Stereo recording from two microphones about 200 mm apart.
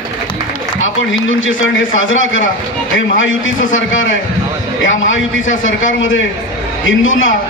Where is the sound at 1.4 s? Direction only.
75° left (ahead or behind).